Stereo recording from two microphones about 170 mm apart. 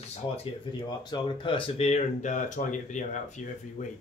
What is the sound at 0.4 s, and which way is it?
Speech, 25° left (ahead or behind).